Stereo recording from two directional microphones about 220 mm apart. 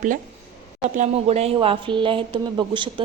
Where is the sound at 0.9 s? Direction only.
30° right (ahead or behind).